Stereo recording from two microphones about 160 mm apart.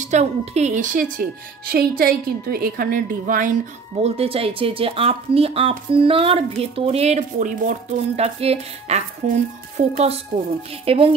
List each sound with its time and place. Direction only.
0.0 s a woman's voice: 45° right (ahead or behind)
4.0 s speech: 35° right (ahead or behind)
7.2 s a woman's voice: 55° right (ahead or behind)
8.2 s a woman's voice: 40° right (ahead or behind)